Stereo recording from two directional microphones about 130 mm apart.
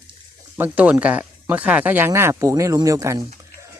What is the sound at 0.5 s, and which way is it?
Speech, 15° right (ahead or behind).